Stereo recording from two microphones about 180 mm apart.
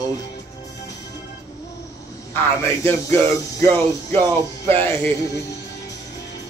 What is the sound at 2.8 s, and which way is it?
Music, 15° left (ahead or behind).